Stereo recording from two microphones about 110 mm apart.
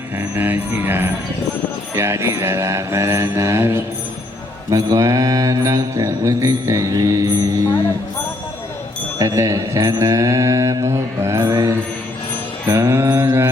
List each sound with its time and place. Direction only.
0.2 s mantra: 20° right (ahead or behind)
9.1 s mantra: 30° right (ahead or behind)